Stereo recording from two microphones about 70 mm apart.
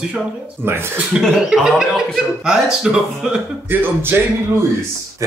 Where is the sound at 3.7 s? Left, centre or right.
Right.